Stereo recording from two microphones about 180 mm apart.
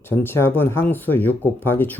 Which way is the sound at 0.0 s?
10° left (ahead or behind).